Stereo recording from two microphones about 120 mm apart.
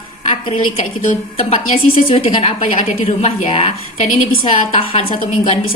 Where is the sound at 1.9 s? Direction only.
50° left (ahead or behind); by 3.5 s 80° left.